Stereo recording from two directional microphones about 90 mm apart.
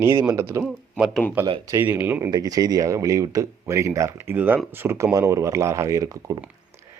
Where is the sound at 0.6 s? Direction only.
10° right (ahead or behind).